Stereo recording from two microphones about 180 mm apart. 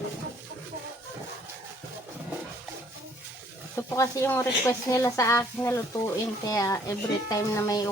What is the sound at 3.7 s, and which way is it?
Speech, 15° left (ahead or behind).